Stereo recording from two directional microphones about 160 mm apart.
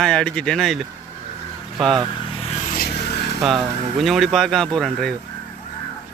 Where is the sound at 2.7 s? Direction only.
75° left (ahead or behind); by 3.3 s 90° left.